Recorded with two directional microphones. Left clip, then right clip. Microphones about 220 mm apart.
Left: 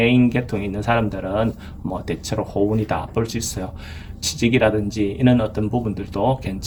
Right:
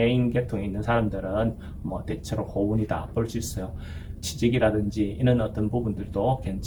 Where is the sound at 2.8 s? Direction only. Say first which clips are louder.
Left 6 dB; 45° left (ahead or behind).